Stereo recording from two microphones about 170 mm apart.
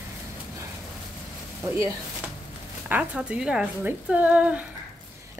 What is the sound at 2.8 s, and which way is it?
A woman's voice, 5° right (ahead or behind).